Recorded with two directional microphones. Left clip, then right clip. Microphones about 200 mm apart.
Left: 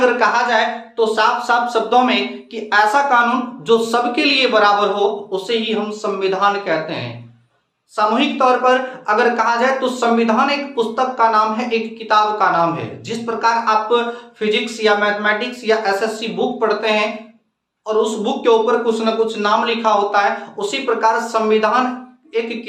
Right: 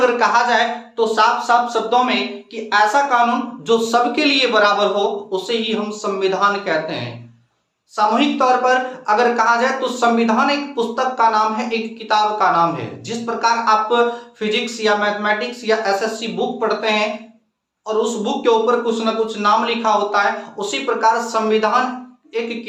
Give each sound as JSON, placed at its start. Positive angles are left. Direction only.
{"t": 0.0, "sound": "speech", "side_deg": 0}
{"t": 1.6, "sound": "speech", "side_deg": 5}